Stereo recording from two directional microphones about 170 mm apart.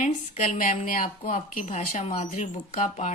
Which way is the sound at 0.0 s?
45° left (ahead or behind).